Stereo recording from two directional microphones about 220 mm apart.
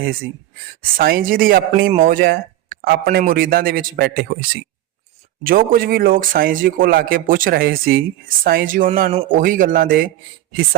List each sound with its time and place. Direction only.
0.0 s a man's voice: 45° right (ahead or behind)